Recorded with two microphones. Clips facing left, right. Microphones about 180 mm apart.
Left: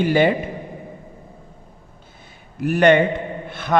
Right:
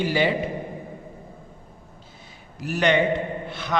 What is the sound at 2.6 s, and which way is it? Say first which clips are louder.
A man's voice: left 6 dB; 55° left (ahead or behind).